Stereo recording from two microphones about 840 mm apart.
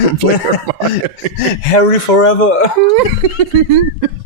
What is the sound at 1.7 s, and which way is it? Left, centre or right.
Speech, left.